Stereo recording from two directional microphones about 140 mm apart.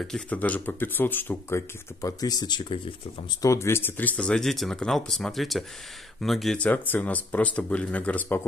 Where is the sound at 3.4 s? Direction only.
20° left (ahead or behind).